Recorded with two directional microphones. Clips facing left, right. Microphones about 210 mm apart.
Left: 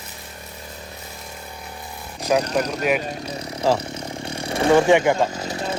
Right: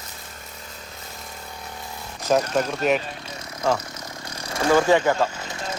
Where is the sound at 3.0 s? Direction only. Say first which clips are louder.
Left 7 dB; 40° left (ahead or behind).